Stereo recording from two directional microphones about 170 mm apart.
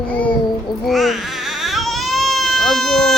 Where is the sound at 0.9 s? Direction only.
Centre (ahead or behind).